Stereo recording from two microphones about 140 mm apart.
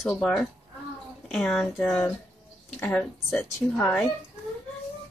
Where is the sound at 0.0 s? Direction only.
Centre (ahead or behind); by 3.9 s 15° left (ahead or behind).